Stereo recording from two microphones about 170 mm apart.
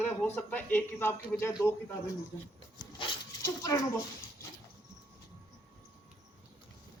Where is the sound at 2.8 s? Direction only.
30° left (ahead or behind).